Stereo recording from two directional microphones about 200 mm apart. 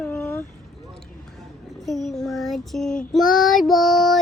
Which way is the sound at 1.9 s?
Centre (ahead or behind).